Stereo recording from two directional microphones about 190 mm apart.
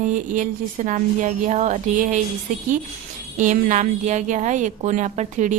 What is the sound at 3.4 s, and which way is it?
A woman's voice, 40° right (ahead or behind).